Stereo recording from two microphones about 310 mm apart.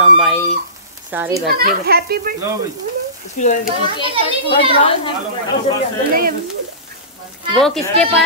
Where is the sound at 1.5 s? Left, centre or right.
Right.